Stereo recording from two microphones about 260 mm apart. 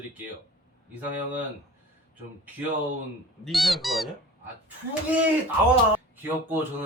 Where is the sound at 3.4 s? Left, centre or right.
Centre.